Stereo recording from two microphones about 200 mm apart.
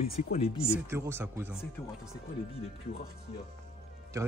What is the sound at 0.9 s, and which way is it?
Speech, 10° right (ahead or behind).